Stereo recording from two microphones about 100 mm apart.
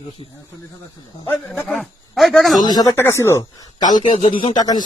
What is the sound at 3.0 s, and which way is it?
Speech, 25° left (ahead or behind).